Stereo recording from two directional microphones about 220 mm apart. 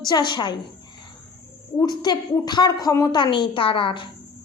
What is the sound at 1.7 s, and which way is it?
A woman's voice, 20° left (ahead or behind).